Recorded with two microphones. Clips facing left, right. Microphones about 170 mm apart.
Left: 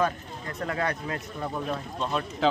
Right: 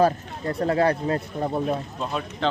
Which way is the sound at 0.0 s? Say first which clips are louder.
Right 7 dB; 35° right (ahead or behind).